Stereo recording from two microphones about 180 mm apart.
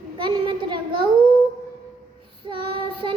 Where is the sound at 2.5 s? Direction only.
30° right (ahead or behind).